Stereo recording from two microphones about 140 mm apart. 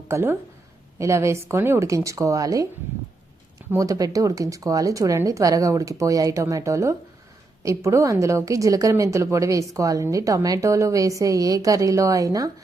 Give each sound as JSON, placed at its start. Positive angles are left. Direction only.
{"t": 0.1, "sound": "speech", "side_deg": -15}
{"t": 3.7, "sound": "speech", "side_deg": -25}